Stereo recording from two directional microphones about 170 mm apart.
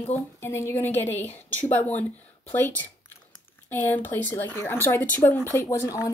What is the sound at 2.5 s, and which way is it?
Speech, 10° left (ahead or behind).